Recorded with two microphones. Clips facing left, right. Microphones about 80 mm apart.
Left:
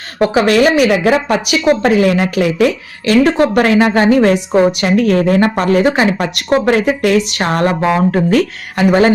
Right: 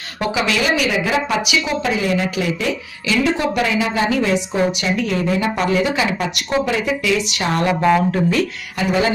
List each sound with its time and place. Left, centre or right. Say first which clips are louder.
0.2 s speech: left 9 dB; left